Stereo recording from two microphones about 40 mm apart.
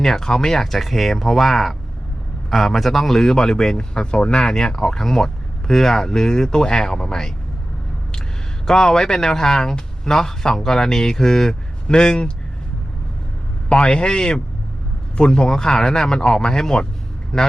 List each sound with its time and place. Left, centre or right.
0.0 s speech: centre; by 4.4 s left
4.4 s speech: centre
8.6 s speech: centre
13.7 s speech: left